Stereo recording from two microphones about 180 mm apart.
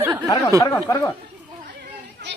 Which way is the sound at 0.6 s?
15° left (ahead or behind).